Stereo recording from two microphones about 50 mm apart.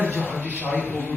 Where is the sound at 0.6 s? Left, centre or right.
Left.